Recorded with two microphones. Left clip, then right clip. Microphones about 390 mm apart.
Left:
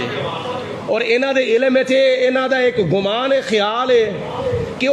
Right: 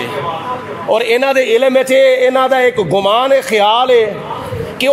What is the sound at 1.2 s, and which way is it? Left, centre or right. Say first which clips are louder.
Speech: right 5 dB; centre.